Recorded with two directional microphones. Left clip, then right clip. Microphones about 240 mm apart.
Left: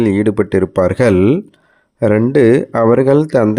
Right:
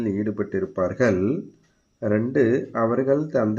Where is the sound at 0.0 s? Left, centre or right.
Left.